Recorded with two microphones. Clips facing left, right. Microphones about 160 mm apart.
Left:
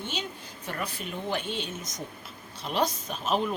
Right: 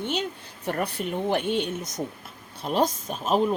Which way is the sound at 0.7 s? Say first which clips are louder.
Right 7 dB; 60° right (ahead or behind).